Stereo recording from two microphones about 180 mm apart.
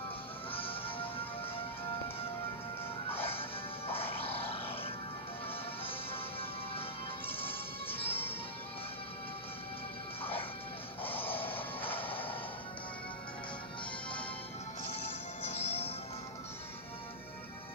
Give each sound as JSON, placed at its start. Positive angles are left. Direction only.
{"t": 0.5, "sound": "music", "side_deg": 30}
{"t": 3.2, "sound": "music", "side_deg": 35}
{"t": 7.2, "sound": "music", "side_deg": 30}
{"t": 11.1, "sound": "music", "side_deg": 10}
{"t": 12.1, "sound": "music", "side_deg": 30}
{"t": 15.4, "sound": "music", "side_deg": 35}